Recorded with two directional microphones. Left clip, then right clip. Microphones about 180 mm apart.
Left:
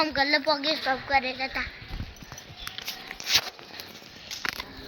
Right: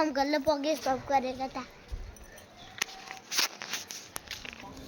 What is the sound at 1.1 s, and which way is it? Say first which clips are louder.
Speech: left 4 dB; 30° right (ahead or behind).